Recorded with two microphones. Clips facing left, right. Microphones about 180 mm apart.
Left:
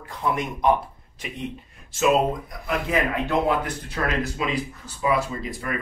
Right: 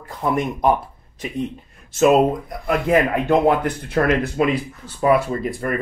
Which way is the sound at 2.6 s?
50° right (ahead or behind).